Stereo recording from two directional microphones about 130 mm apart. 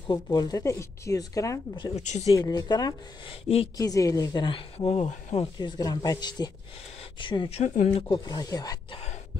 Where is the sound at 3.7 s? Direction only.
25° left (ahead or behind).